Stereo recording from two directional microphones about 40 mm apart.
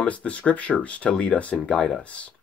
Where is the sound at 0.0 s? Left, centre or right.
Left.